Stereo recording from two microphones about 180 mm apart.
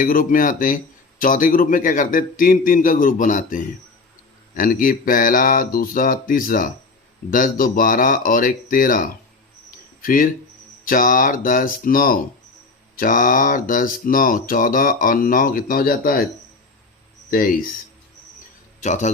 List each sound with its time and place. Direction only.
0.0 s speech: 50° left (ahead or behind)
18.8 s a man's voice: 40° left (ahead or behind)